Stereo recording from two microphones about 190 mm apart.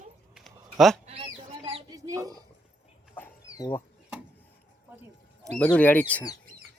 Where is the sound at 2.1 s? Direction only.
20° right (ahead or behind).